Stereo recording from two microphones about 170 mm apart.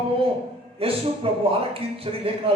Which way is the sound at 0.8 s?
35° right (ahead or behind).